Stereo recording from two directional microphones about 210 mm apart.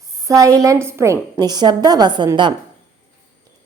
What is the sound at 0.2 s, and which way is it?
A woman's voice, 15° right (ahead or behind).